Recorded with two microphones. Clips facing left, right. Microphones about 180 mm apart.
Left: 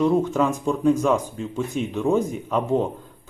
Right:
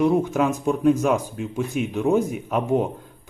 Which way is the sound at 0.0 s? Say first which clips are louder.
Even; 10° right (ahead or behind).